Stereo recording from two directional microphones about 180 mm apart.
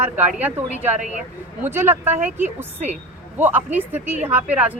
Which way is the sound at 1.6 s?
10° right (ahead or behind).